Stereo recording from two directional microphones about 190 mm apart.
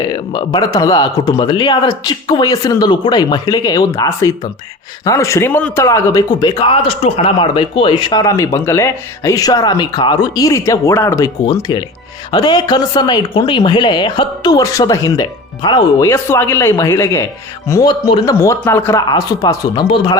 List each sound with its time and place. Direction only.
0.1 s speech: 25° left (ahead or behind)